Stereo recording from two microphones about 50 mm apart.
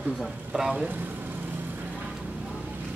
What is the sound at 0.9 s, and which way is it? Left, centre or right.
Vehicle, right.